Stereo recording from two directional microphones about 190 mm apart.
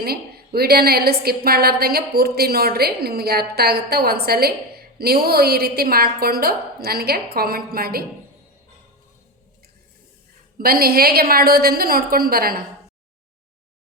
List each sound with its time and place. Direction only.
0.0 s a woman's voice: 55° right (ahead or behind)
10.6 s a woman's voice: 50° right (ahead or behind)